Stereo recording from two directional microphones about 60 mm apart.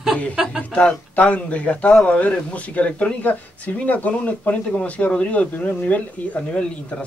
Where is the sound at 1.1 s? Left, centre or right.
Left.